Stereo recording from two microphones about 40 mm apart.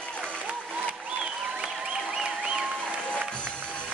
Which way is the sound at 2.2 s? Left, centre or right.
Centre.